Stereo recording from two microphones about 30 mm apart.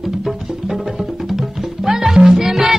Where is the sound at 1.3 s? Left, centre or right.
Centre.